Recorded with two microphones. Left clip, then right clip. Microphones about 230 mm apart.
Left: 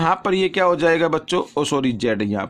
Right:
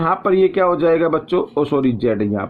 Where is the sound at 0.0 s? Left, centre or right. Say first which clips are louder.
Right 3 dB; left.